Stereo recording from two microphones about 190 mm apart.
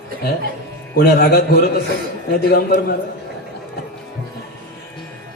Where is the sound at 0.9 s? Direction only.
55° left (ahead or behind).